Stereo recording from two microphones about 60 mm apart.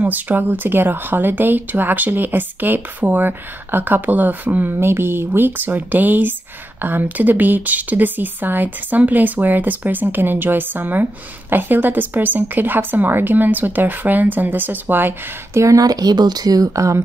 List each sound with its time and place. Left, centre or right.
0.0 s speech: right
4.7 s speech: right
15.5 s speech: right